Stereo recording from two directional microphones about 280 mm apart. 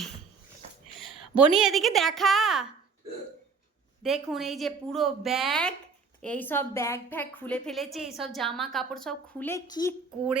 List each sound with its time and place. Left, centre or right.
0.6 s a sound: right
1.0 s a woman's voice: centre
4.0 s a woman's voice: centre